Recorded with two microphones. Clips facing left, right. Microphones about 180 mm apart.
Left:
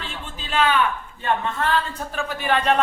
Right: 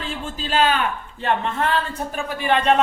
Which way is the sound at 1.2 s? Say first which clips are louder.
Right 2 dB; 25° right (ahead or behind).